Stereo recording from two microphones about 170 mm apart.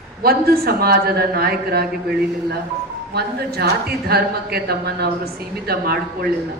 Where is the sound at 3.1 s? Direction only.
70° right (ahead or behind).